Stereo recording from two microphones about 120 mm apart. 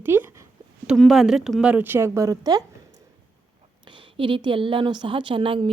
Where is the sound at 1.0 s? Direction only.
Centre (ahead or behind); by 2.6 s 30° right (ahead or behind).